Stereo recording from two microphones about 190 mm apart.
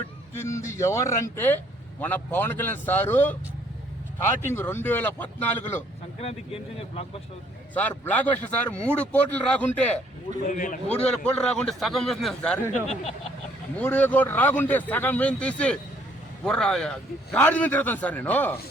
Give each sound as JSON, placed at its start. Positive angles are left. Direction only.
{"t": 0.3, "sound": "a man's voice", "side_deg": 15}
{"t": 6.1, "sound": "speech", "side_deg": 30}
{"t": 7.7, "sound": "a man's voice", "side_deg": 10}
{"t": 10.4, "sound": "a man's voice", "side_deg": 45}
{"t": 10.8, "sound": "a man's voice", "side_deg": 5}
{"t": 13.7, "sound": "a man's voice", "side_deg": 10}